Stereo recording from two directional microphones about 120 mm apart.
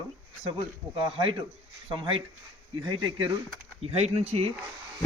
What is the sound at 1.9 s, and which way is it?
Speech, 45° right (ahead or behind).